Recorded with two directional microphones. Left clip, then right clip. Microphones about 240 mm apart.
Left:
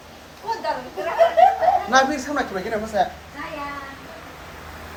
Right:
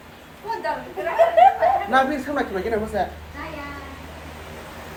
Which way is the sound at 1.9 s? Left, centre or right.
Centre.